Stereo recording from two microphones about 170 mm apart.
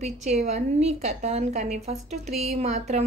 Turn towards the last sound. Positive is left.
turn(degrees=-40)  # may be behind; listen again after turning